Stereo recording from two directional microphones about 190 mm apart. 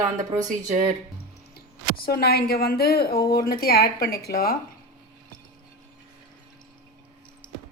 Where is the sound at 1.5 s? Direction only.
55° left (ahead or behind).